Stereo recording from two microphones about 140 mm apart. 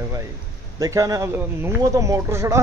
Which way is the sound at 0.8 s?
25° right (ahead or behind).